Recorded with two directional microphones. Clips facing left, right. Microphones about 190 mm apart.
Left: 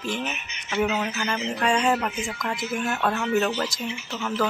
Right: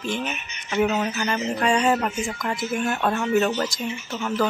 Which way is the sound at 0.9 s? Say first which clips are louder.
Right 3 dB; 15° right (ahead or behind).